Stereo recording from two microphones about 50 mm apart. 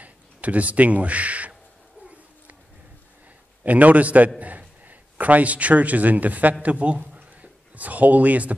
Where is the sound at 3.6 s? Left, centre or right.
Right.